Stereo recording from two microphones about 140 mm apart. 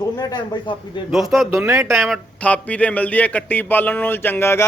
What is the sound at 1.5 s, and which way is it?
Speech, 20° right (ahead or behind).